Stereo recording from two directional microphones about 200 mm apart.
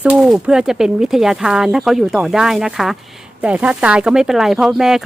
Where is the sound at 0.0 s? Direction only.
5° right (ahead or behind).